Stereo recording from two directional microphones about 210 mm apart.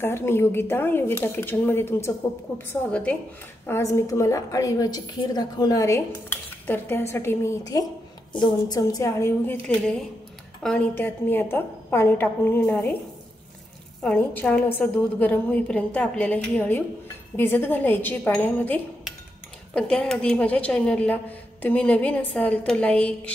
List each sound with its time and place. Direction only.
0.0 s a woman's voice: 10° left (ahead or behind)
14.0 s a woman's voice: 5° left (ahead or behind)